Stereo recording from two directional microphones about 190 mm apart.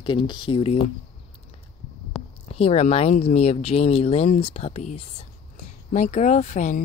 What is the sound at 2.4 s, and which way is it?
Speech, 30° left (ahead or behind).